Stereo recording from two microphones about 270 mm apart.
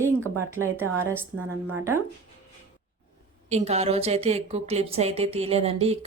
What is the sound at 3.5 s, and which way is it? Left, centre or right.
Speech, right.